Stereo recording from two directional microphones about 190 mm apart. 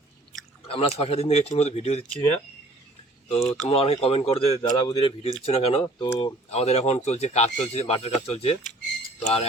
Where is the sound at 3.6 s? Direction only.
30° left (ahead or behind).